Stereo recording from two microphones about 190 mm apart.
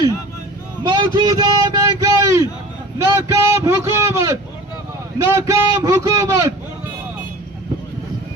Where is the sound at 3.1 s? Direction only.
15° right (ahead or behind).